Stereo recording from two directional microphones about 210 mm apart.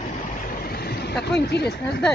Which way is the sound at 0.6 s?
45° left (ahead or behind).